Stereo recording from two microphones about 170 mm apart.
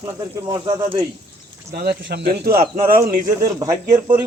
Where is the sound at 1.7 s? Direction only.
70° right (ahead or behind).